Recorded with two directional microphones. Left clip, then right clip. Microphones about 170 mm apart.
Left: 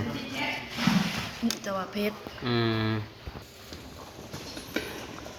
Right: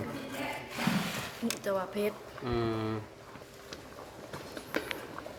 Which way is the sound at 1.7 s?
50° right (ahead or behind).